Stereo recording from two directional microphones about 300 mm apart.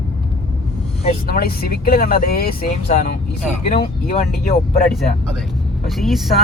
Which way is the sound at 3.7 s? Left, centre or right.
Centre.